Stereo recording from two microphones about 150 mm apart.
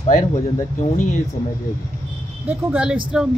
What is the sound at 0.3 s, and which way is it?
Speech, 55° left (ahead or behind).